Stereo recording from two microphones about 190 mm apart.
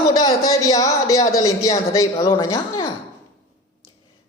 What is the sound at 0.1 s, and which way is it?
A man's voice, 20° left (ahead or behind).